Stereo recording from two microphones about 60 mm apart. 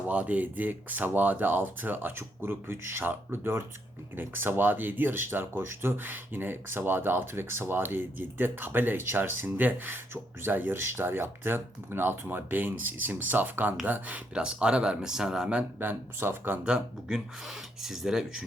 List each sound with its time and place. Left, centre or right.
0.1 s speech: right
14.3 s speech: centre
15.8 s speech: right
16.6 s speech: centre